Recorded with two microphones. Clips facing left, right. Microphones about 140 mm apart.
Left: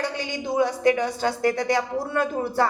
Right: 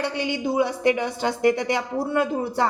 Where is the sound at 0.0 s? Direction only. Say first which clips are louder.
Right 3 dB; 10° right (ahead or behind).